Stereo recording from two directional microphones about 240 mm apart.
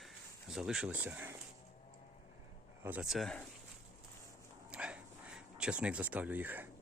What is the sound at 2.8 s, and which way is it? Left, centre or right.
Speech, centre.